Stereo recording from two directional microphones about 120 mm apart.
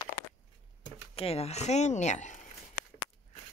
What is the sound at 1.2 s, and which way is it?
Speech, 55° left (ahead or behind).